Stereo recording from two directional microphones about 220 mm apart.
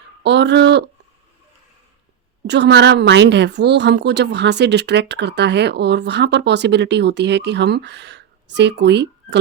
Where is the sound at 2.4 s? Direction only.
50° right (ahead or behind).